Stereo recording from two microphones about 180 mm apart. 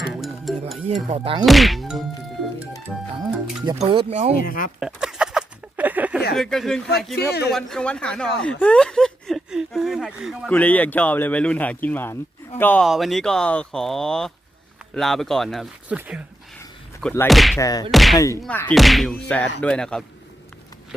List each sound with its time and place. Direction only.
0.1 s music: centre (ahead or behind)
1.1 s speech: 30° right (ahead or behind)
1.5 s speech: centre (ahead or behind)
3.8 s speech: 35° right (ahead or behind)
4.4 s speech: 50° left (ahead or behind)
4.8 s a sound: 5° right (ahead or behind)
6.3 s speech: centre (ahead or behind)
7.2 s speech: 65° left (ahead or behind)
7.5 s speech: 5° left (ahead or behind)
12.8 s speech: centre (ahead or behind)
17.0 s speech: 5° left (ahead or behind)
17.6 s a sound: 20° left (ahead or behind)
17.9 s speech: centre (ahead or behind)